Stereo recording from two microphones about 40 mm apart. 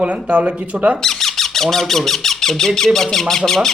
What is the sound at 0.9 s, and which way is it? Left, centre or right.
Speech, centre.